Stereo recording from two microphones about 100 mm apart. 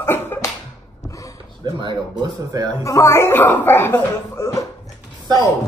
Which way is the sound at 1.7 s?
50° right (ahead or behind).